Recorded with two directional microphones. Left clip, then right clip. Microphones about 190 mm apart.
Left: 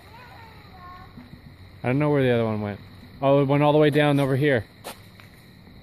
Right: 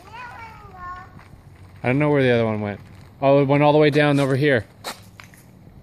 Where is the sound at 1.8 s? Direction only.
Centre (ahead or behind).